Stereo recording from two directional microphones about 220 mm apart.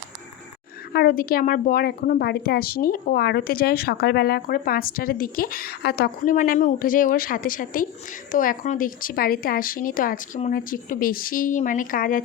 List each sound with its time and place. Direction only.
0.9 s a woman's voice: 40° left (ahead or behind)